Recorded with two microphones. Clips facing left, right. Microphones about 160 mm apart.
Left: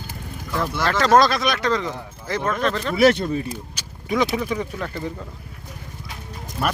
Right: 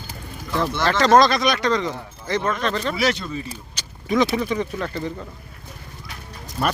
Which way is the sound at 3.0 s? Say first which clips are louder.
Left 7 dB; 55° left (ahead or behind).